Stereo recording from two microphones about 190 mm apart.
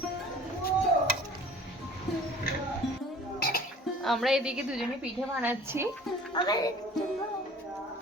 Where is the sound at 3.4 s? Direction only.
50° left (ahead or behind).